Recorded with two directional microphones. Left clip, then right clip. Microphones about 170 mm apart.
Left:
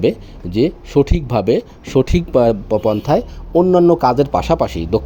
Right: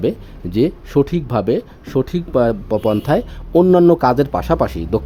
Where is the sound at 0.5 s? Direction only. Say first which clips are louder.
Left 1 dB; 15° right (ahead or behind).